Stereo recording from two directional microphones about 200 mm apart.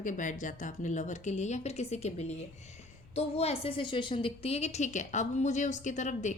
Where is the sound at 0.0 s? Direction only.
40° left (ahead or behind).